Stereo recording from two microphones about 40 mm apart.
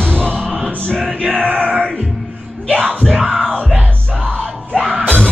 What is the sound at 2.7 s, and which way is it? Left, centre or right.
Yell, left.